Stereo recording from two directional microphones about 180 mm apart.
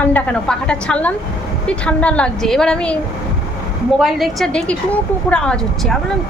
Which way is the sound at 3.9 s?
Centre (ahead or behind).